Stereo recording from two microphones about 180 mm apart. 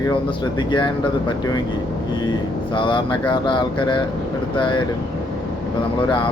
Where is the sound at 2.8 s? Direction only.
25° left (ahead or behind).